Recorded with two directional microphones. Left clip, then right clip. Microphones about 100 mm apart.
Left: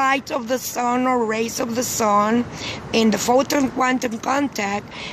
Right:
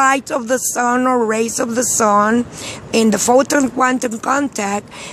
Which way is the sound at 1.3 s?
45° right (ahead or behind).